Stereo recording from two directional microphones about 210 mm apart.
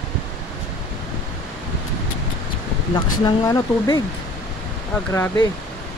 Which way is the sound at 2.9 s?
20° left (ahead or behind).